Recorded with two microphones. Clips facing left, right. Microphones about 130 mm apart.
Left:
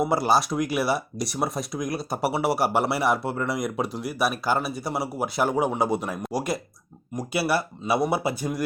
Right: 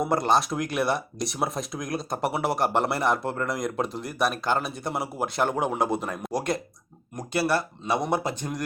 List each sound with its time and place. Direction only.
0.0 s speech: 5° left (ahead or behind)